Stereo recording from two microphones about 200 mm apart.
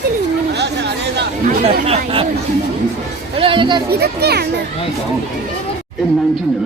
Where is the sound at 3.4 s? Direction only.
25° right (ahead or behind).